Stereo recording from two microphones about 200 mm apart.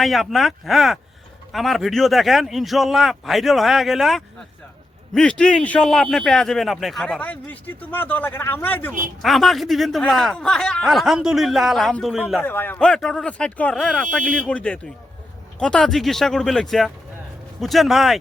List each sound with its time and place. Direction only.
0.0 s speech: centre (ahead or behind)
12.4 s speech: 10° left (ahead or behind)